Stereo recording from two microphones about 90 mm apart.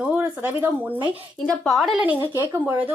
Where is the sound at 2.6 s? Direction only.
20° right (ahead or behind).